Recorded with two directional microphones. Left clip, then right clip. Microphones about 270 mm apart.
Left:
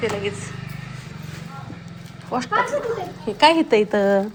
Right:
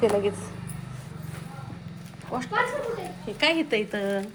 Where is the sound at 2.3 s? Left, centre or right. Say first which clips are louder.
Left 7 dB; centre.